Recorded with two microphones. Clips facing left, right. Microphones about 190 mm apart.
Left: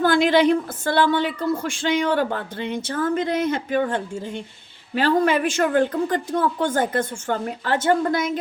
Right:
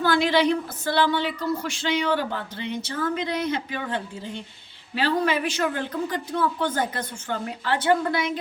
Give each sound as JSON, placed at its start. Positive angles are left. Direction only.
{"t": 0.0, "sound": "a woman's voice", "side_deg": 50}